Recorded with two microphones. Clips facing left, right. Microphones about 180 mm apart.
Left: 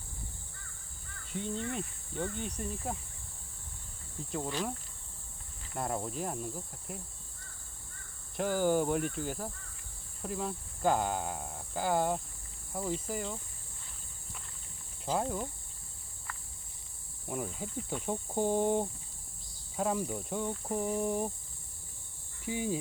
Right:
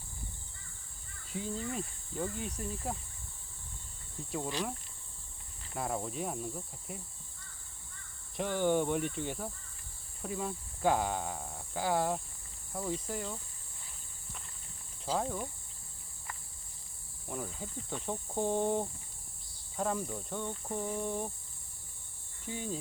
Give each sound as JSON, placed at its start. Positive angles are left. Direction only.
{"t": 1.3, "sound": "speech", "side_deg": 0}
{"t": 4.2, "sound": "speech", "side_deg": 0}
{"t": 5.7, "sound": "speech", "side_deg": 0}
{"t": 8.4, "sound": "speech", "side_deg": 5}
{"t": 15.0, "sound": "speech", "side_deg": 10}
{"t": 16.3, "sound": "cricket", "side_deg": -15}
{"t": 17.2, "sound": "speech", "side_deg": 5}
{"t": 22.4, "sound": "speech", "side_deg": 10}